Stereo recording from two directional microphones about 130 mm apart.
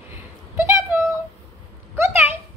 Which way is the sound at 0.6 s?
20° right (ahead or behind).